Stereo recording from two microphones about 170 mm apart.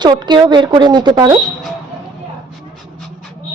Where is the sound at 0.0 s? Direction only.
25° right (ahead or behind).